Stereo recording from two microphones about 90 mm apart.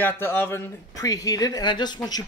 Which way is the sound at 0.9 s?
40° left (ahead or behind).